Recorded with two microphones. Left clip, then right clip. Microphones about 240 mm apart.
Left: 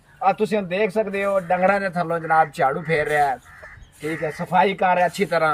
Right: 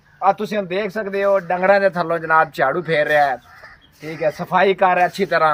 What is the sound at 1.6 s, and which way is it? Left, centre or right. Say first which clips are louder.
A man's voice: right 5 dB; right.